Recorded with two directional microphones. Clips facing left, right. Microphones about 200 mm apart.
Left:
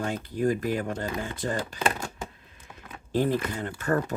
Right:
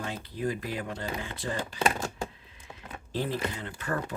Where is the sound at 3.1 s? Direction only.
50° left (ahead or behind).